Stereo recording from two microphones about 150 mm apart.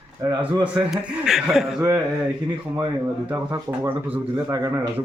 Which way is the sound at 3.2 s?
15° right (ahead or behind).